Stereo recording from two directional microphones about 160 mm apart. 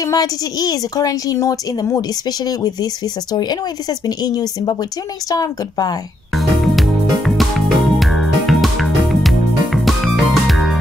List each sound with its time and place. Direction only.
0.0 s a woman's voice: 20° left (ahead or behind)
4.0 s a woman's voice: 25° left (ahead or behind)
6.3 s music: centre (ahead or behind)